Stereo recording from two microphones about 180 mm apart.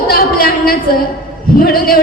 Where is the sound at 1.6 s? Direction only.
55° left (ahead or behind).